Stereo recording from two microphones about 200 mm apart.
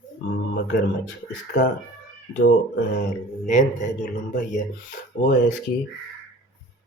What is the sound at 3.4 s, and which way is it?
Speech, 40° left (ahead or behind).